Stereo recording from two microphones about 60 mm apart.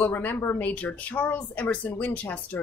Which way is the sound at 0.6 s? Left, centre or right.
Left.